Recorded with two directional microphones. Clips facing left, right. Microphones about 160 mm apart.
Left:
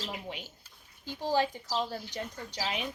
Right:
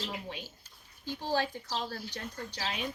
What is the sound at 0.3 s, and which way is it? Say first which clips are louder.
Speech: left 1 dB; 15° left (ahead or behind).